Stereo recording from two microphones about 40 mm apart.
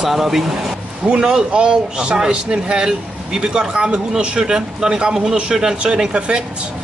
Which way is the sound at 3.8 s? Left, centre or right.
Right.